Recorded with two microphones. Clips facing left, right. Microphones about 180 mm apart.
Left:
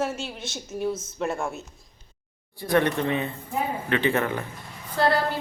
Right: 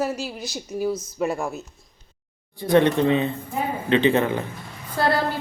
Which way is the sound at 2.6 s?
20° right (ahead or behind).